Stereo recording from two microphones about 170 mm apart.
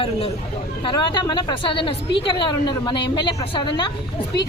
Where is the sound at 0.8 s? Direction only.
30° left (ahead or behind).